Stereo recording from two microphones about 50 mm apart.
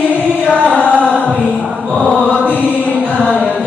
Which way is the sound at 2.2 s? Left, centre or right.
Left.